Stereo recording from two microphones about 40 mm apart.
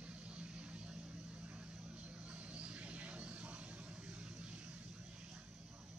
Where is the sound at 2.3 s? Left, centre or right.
Right.